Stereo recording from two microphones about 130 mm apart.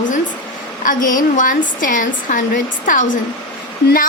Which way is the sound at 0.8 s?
90° left.